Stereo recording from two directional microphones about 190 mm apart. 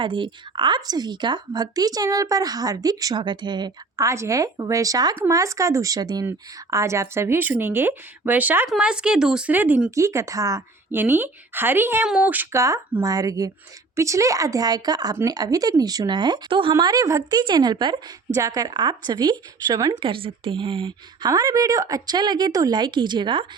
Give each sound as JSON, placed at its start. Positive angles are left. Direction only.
{"t": 0.0, "sound": "speech", "side_deg": -25}